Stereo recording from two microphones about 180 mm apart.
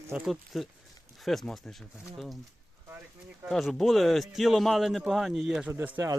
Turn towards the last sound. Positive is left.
turn(degrees=-15)  # may be behind; listen again after turning